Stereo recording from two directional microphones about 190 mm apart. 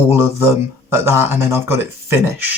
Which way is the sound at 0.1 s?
15° right (ahead or behind).